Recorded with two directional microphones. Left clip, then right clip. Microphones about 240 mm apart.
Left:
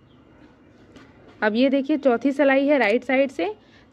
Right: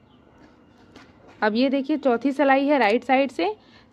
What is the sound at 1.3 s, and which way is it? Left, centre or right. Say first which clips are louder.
A woman's voice: left 2 dB; centre.